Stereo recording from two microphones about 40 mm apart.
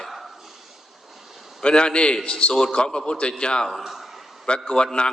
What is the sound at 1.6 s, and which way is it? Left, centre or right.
A man's voice, left.